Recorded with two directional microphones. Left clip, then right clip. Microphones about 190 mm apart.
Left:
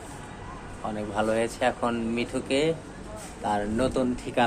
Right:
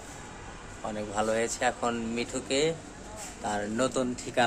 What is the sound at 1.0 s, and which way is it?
Speech, 10° right (ahead or behind).